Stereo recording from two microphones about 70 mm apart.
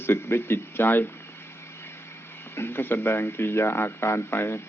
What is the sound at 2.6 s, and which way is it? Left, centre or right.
Speech, left.